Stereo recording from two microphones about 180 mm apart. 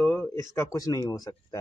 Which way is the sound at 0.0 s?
10° left (ahead or behind).